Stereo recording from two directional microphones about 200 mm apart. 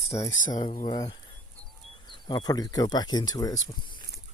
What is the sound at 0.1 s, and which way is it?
Speech, 15° left (ahead or behind).